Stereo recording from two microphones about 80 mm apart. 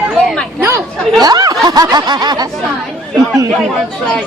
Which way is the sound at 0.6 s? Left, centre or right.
Right.